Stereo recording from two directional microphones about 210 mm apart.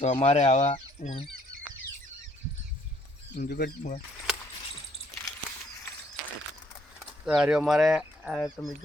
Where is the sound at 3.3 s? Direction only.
50° left (ahead or behind).